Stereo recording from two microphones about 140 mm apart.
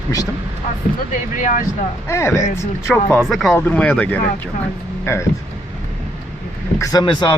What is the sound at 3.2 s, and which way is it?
Speech, centre (ahead or behind).